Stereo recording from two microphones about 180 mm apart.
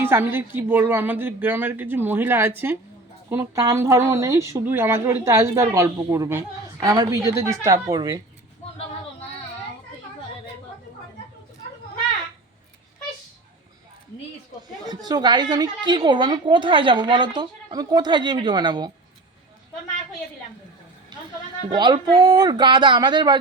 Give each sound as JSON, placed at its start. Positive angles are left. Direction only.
{"t": 0.0, "sound": "speech", "side_deg": -10}
{"t": 14.8, "sound": "a woman's voice", "side_deg": -20}
{"t": 21.7, "sound": "a woman's voice", "side_deg": -25}